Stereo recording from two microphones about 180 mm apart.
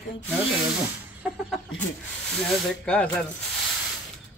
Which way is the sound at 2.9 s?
5° left (ahead or behind).